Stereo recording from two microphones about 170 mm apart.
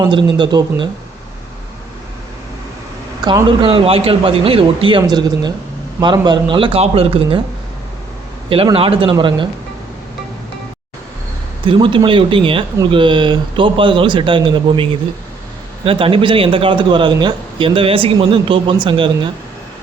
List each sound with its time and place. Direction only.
0.0 s speech: 30° right (ahead or behind)
3.2 s a man's voice: 30° right (ahead or behind)
8.4 s a man's voice: 30° right (ahead or behind)
11.6 s a man's voice: 30° right (ahead or behind)